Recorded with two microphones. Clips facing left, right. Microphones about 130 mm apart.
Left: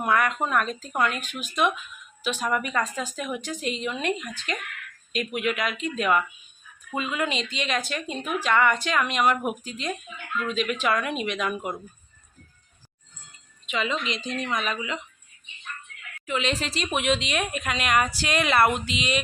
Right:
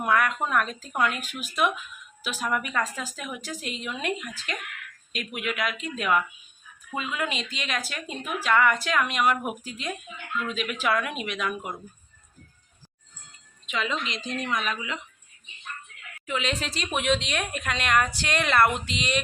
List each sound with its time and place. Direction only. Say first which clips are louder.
0.0 s a woman's voice: left 1 dB; centre (ahead or behind)
13.7 s a woman's voice: left 2 dB; centre (ahead or behind)
16.2 s a woman's voice: left 2 dB; centre (ahead or behind)